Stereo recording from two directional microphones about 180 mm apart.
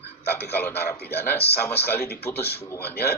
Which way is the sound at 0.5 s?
10° left (ahead or behind).